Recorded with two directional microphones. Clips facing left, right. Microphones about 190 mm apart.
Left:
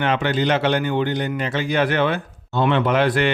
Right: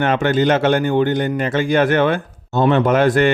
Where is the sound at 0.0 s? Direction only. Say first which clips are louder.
Right 4 dB; 50° right (ahead or behind).